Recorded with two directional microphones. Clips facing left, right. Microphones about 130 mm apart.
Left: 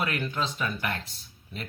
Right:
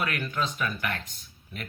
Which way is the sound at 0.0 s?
25° left (ahead or behind).